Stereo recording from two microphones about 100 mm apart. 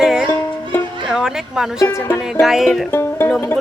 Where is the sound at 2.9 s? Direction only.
25° left (ahead or behind).